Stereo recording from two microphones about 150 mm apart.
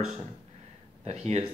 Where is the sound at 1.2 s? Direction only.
45° right (ahead or behind).